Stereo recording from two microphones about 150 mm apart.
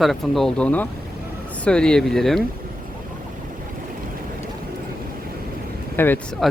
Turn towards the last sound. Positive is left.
turn(degrees=0)  # may be behind; listen again after turning